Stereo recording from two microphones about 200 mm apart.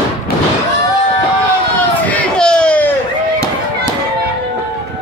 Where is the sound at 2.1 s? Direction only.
5° left (ahead or behind).